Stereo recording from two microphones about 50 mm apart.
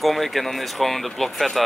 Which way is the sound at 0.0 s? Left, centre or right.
Centre.